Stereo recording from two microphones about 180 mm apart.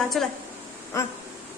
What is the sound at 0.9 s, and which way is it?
Speech, 15° left (ahead or behind).